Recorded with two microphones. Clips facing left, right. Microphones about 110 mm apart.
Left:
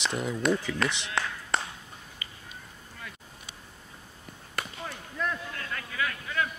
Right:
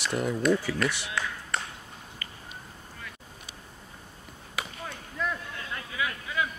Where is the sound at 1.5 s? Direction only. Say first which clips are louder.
Left 3 dB; 25° left (ahead or behind).